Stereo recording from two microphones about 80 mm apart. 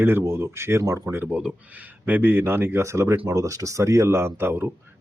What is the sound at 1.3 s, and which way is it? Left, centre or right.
Speech, centre.